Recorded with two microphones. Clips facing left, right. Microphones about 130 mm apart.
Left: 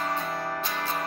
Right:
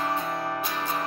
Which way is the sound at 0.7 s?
10° right (ahead or behind).